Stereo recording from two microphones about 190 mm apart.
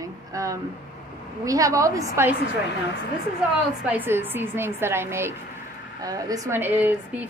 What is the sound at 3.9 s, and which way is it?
A woman's voice, 10° right (ahead or behind).